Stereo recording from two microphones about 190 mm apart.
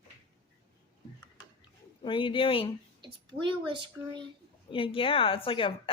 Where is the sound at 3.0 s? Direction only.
25° right (ahead or behind).